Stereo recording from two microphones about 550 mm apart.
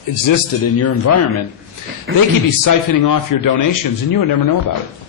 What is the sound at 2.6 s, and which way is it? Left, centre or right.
A man's voice, left.